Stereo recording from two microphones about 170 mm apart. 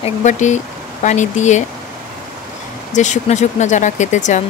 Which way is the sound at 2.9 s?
45° left (ahead or behind).